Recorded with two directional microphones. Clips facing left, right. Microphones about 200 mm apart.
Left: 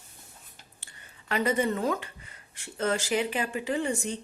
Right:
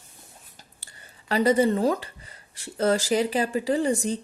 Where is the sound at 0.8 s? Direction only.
35° right (ahead or behind).